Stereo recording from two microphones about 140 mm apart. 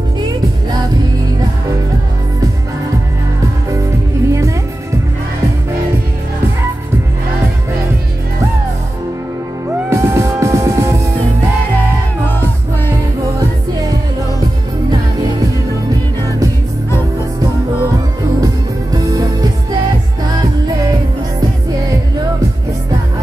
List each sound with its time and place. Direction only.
4.3 s music: 20° right (ahead or behind)
9.8 s music: 20° right (ahead or behind)
18.4 s music: 25° right (ahead or behind)